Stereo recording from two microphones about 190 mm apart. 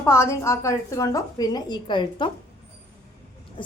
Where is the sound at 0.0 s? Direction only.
15° left (ahead or behind).